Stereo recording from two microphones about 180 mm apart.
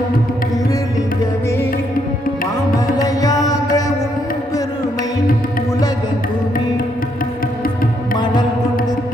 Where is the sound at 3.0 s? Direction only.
20° left (ahead or behind).